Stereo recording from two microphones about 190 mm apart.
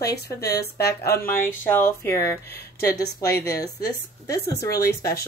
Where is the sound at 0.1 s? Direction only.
55° left (ahead or behind).